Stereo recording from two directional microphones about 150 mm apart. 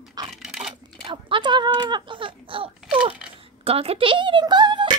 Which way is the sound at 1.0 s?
35° right (ahead or behind).